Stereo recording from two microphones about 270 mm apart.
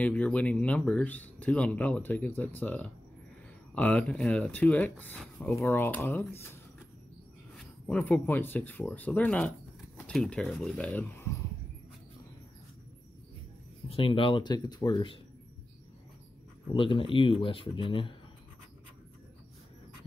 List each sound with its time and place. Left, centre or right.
0.0 s speech: centre
7.5 s speech: centre
13.8 s speech: centre
16.7 s speech: centre